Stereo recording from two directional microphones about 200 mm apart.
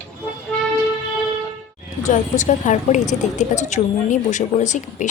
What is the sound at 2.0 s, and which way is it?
A woman's voice, 35° left (ahead or behind).